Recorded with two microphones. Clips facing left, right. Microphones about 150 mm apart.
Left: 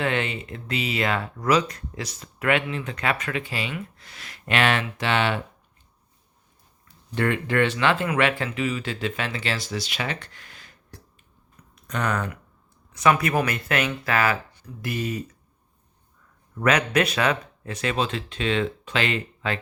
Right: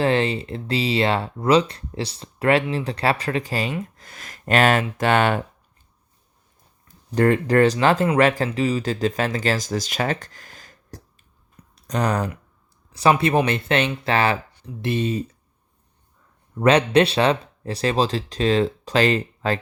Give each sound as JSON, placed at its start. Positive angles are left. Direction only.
{"t": 0.0, "sound": "speech", "side_deg": -35}
{"t": 6.8, "sound": "speech", "side_deg": -40}
{"t": 16.6, "sound": "speech", "side_deg": -30}